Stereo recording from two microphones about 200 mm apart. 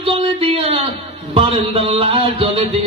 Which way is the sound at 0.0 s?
30° right (ahead or behind).